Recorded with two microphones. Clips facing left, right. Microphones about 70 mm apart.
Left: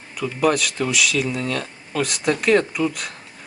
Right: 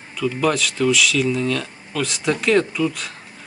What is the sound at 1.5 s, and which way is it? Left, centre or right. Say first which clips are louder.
Speech: right 2 dB; left.